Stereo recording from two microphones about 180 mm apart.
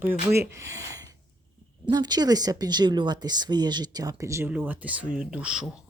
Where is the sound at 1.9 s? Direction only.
25° right (ahead or behind).